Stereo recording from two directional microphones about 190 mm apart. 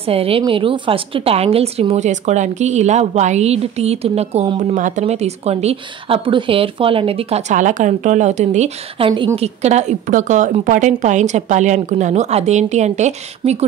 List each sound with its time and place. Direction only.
0.1 s a woman's voice: 30° right (ahead or behind)